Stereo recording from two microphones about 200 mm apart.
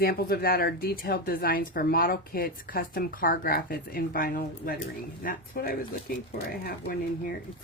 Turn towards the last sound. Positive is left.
turn(degrees=45)  # may be behind; listen again after turning